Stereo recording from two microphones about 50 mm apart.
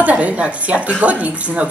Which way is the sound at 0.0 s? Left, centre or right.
Right.